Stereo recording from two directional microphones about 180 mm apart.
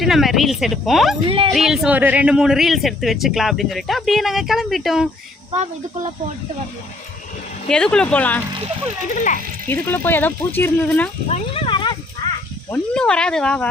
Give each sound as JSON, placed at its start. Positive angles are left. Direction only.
{"t": 0.0, "sound": "speech", "side_deg": 0}
{"t": 7.7, "sound": "speech", "side_deg": 5}
{"t": 9.1, "sound": "speech", "side_deg": 45}
{"t": 9.6, "sound": "speech", "side_deg": 10}
{"t": 11.3, "sound": "a sound", "side_deg": 35}
{"t": 12.7, "sound": "speech", "side_deg": 5}